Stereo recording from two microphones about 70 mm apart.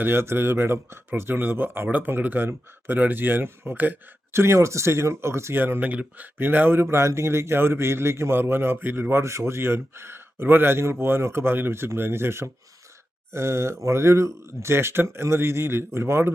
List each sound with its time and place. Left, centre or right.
0.0 s a man's voice: right
6.9 s a man's voice: right